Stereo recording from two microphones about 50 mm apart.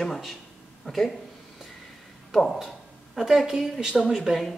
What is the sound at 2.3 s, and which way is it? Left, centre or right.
Speech, centre.